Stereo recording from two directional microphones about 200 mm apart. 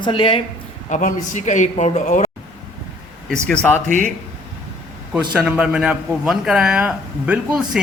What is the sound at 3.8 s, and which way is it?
Speech, 40° right (ahead or behind).